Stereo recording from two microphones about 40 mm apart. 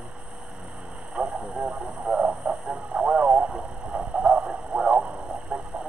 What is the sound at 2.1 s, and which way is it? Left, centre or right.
Radio, right.